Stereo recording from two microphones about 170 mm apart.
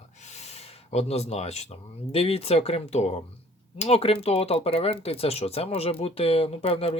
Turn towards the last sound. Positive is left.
turn(degrees=35)  # may be behind; listen again after turning